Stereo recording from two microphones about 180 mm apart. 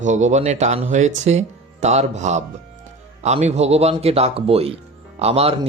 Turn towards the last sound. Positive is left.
turn(degrees=-35)  # may be behind; listen again after turning